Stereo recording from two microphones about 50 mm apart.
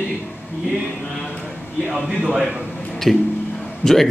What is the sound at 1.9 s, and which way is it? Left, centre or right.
A man's voice, centre.